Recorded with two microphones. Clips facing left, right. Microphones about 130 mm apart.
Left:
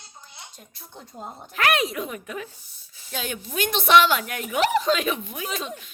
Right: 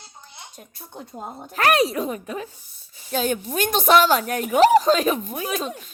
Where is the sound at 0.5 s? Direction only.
50° right (ahead or behind); by 2.5 s 35° right (ahead or behind).